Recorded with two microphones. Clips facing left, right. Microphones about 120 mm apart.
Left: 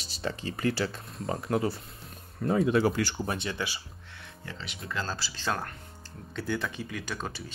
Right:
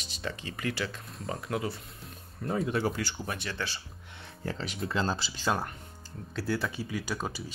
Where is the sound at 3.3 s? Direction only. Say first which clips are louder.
Left 4 dB; 25° left (ahead or behind).